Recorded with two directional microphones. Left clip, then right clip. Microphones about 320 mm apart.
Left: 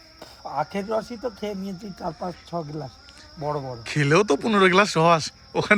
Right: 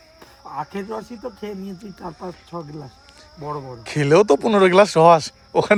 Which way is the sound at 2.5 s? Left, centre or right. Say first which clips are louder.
Left 2 dB; left.